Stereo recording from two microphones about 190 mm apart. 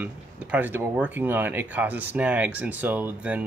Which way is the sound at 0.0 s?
10° right (ahead or behind).